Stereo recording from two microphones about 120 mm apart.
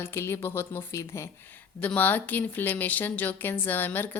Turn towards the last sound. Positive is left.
turn(degrees=15)  # may be behind; listen again after turning